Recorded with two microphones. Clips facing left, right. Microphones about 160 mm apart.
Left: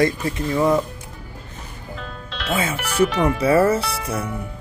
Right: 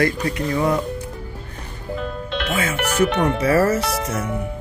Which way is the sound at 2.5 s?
30° left (ahead or behind).